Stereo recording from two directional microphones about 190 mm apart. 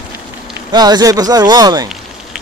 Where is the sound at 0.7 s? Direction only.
20° right (ahead or behind).